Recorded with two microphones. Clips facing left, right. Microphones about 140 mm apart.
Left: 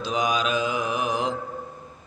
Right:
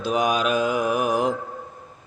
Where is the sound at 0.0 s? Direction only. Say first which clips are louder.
Right 3 dB; 55° right (ahead or behind).